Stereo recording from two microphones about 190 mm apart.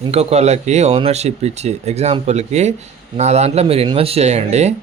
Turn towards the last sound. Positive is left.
turn(degrees=-35)  # may be behind; listen again after turning